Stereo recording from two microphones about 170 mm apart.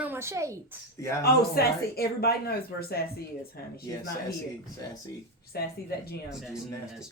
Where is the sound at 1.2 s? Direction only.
65° left (ahead or behind).